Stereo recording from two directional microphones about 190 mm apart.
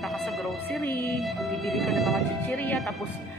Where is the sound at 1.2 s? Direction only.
Centre (ahead or behind).